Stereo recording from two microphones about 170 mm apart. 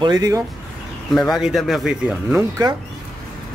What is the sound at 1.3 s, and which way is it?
Speech, centre (ahead or behind).